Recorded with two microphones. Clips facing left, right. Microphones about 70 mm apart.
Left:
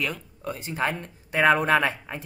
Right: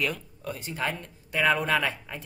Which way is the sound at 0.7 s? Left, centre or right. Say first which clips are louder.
Left 4 dB; left.